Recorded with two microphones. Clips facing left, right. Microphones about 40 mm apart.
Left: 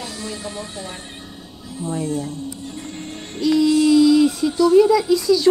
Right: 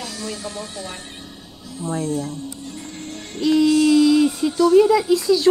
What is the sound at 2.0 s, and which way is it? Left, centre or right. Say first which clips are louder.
Speech: even; left.